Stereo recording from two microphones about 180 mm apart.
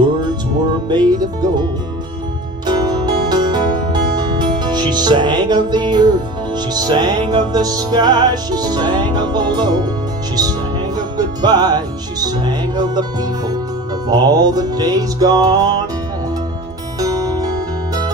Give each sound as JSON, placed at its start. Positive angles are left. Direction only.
{"t": 0.8, "sound": "music", "side_deg": -25}
{"t": 11.0, "sound": "music", "side_deg": -20}
{"t": 17.0, "sound": "music", "side_deg": -20}